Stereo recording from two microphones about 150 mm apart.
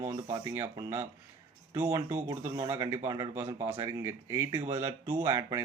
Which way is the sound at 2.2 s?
25° right (ahead or behind).